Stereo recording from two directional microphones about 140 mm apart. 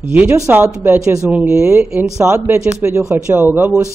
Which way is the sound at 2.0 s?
20° right (ahead or behind).